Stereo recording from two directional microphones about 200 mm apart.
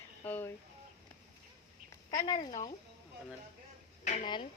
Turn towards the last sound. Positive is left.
turn(degrees=25)  # may be behind; listen again after turning